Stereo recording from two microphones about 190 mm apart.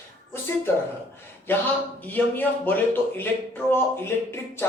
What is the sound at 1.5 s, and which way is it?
Speech, 10° left (ahead or behind).